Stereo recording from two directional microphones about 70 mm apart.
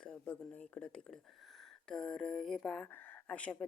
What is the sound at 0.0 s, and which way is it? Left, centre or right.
A woman's voice, centre.